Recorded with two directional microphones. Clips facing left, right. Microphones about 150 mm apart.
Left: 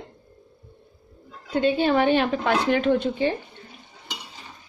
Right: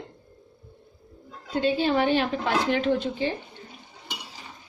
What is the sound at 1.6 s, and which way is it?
Speech, 55° left (ahead or behind).